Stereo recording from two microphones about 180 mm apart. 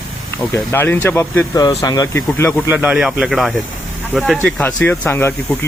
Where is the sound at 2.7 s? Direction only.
5° right (ahead or behind).